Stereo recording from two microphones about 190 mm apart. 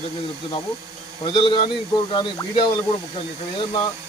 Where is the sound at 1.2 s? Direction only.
25° left (ahead or behind).